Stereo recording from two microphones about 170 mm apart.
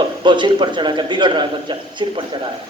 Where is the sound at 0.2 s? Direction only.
25° right (ahead or behind).